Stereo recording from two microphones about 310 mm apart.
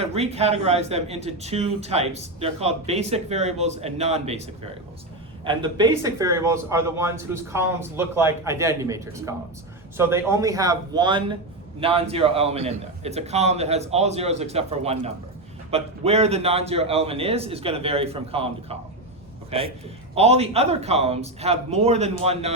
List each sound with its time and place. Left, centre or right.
0.0 s speech: centre
5.5 s a man's voice: centre